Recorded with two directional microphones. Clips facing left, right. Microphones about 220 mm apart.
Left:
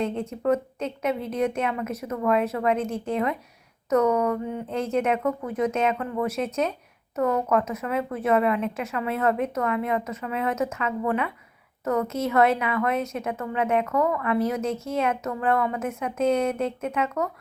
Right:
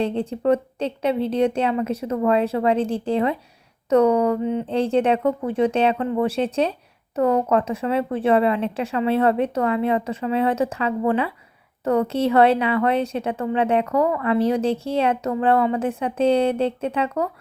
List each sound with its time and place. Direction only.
0.0 s a woman's voice: 30° right (ahead or behind)